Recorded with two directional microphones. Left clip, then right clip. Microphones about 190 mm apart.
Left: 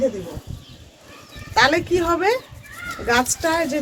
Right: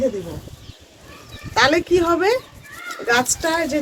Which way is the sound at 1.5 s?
20° right (ahead or behind).